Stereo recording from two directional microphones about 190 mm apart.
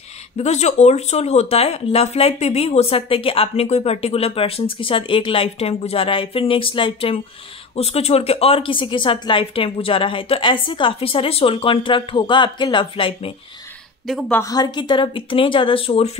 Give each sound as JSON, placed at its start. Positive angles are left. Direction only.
{"t": 0.4, "sound": "speech", "side_deg": 35}
{"t": 14.0, "sound": "speech", "side_deg": 0}
{"t": 14.4, "sound": "speech", "side_deg": 20}